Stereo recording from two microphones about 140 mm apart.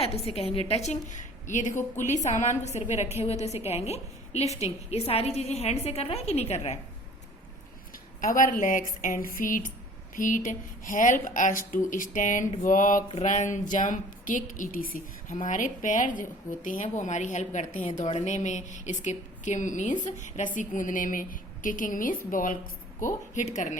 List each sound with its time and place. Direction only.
0.0 s a woman's voice: 45° left (ahead or behind)
8.2 s speech: 75° left (ahead or behind)
13.2 s speech: 60° left (ahead or behind)